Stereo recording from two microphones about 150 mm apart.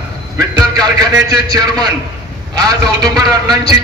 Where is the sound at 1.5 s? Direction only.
25° right (ahead or behind).